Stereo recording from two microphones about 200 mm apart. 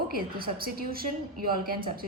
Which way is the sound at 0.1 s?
45° right (ahead or behind).